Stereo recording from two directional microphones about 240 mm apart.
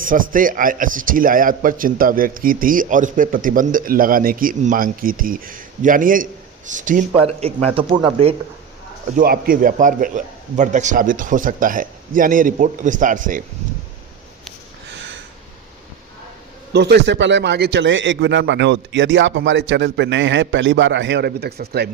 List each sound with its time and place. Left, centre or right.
0.0 s a man's voice: right
9.1 s a man's voice: right
14.8 s a sound: right
16.7 s a man's voice: right